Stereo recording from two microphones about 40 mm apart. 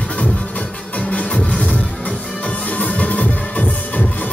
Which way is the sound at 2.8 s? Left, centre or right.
Left.